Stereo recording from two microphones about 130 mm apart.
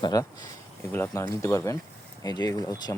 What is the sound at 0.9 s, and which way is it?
Speech, 20° left (ahead or behind).